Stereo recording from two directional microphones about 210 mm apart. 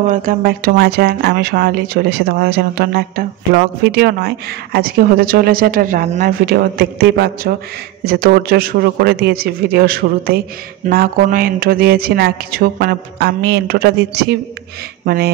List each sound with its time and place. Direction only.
0.1 s speech: 40° right (ahead or behind)